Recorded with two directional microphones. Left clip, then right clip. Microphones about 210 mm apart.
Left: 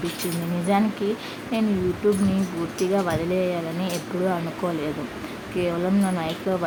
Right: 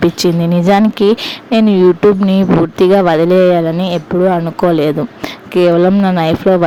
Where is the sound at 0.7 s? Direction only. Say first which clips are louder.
Right 13 dB; 50° right (ahead or behind).